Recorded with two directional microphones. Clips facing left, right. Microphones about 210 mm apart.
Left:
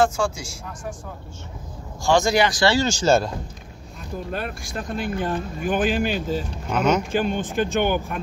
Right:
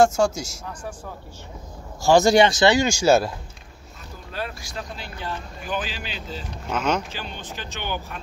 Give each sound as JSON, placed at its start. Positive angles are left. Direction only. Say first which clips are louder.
{"t": 0.0, "sound": "speech", "louder": "right 3 dB", "side_deg": -45}
{"t": 2.0, "sound": "speech", "louder": "right 3 dB", "side_deg": -35}
{"t": 4.3, "sound": "speech", "louder": "even", "side_deg": 55}
{"t": 6.7, "sound": "speech", "louder": "left 4 dB", "side_deg": 5}
{"t": 7.1, "sound": "speech", "louder": "left 12 dB", "side_deg": 50}